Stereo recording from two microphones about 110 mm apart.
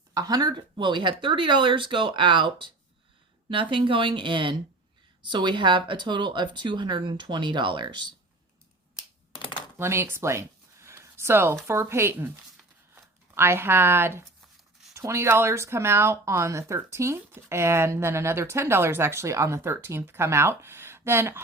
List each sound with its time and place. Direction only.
0.1 s speech: 35° right (ahead or behind)
9.3 s computer keyboard: 50° left (ahead or behind)
9.7 s a sound: 25° right (ahead or behind)
11.7 s speech: 25° right (ahead or behind)